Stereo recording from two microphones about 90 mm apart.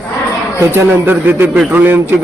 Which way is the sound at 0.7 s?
25° right (ahead or behind).